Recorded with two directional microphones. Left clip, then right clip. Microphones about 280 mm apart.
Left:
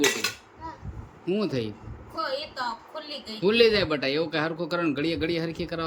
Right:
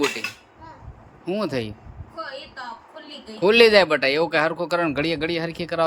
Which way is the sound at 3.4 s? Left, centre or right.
Centre.